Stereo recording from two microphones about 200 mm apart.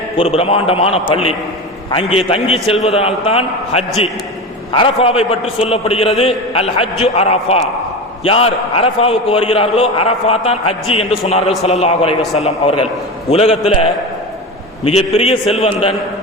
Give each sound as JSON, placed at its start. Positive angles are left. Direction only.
{"t": 0.2, "sound": "a man's voice", "side_deg": 30}